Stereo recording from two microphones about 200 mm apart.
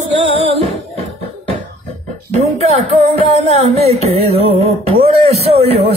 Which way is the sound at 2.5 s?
30° right (ahead or behind).